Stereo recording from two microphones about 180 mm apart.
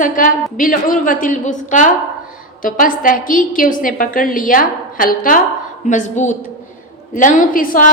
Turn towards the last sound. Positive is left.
turn(degrees=50)  # may be behind; listen again after turning